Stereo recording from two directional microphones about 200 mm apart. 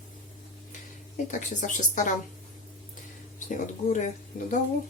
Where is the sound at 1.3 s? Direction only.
40° left (ahead or behind).